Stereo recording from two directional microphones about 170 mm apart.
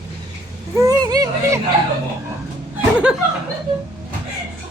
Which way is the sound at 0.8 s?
20° right (ahead or behind).